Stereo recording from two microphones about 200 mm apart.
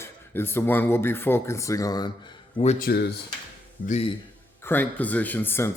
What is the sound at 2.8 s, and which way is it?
Speech, 55° left (ahead or behind).